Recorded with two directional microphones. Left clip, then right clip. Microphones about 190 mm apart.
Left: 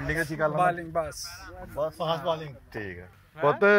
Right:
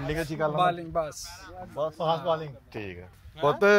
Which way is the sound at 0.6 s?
10° right (ahead or behind).